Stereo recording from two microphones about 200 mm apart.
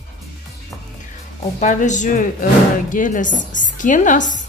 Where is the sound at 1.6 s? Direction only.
40° left (ahead or behind).